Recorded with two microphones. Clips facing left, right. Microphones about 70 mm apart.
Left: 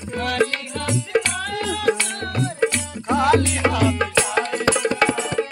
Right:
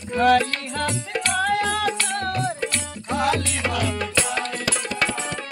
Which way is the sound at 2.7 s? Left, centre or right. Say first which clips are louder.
Left 5 dB; centre.